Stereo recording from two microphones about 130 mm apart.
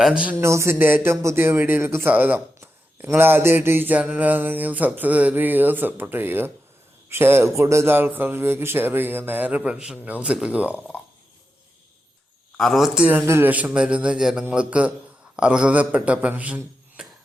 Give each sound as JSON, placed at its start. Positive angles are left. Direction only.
{"t": 0.0, "sound": "speech", "side_deg": -10}
{"t": 0.3, "sound": "speech", "side_deg": -20}
{"t": 12.5, "sound": "speech", "side_deg": 0}